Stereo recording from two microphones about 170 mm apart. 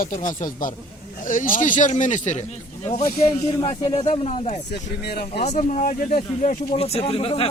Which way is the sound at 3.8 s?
35° left (ahead or behind).